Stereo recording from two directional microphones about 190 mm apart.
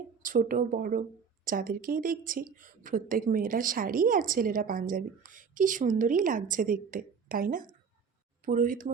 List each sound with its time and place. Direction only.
0.2 s a woman's voice: 45° right (ahead or behind)